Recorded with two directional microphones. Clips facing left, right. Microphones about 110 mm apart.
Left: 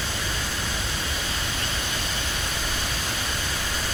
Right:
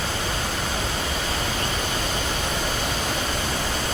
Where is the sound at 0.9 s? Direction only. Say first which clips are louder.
Right 4 dB; 60° right (ahead or behind).